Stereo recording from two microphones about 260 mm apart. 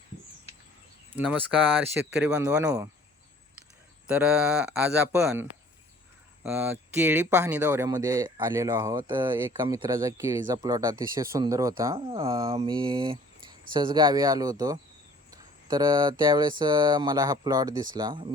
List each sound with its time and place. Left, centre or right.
1.1 s speech: centre
4.0 s speech: centre